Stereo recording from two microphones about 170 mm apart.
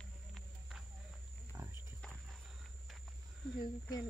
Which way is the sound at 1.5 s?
15° right (ahead or behind).